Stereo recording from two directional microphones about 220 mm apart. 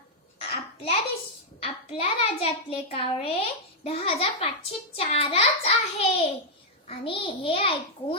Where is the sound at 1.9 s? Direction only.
25° left (ahead or behind).